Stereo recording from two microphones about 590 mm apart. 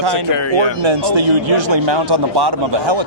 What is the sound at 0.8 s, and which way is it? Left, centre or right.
A man's voice, right.